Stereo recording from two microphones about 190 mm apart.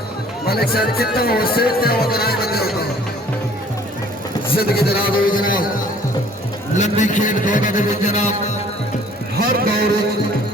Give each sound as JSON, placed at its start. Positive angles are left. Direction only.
{"t": 0.4, "sound": "speech", "side_deg": 55}
{"t": 4.5, "sound": "speech", "side_deg": 50}
{"t": 6.7, "sound": "a man's voice", "side_deg": 40}
{"t": 9.5, "sound": "vehicle", "side_deg": -55}